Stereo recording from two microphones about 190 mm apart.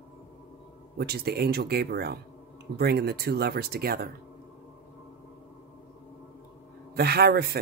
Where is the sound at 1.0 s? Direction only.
55° right (ahead or behind).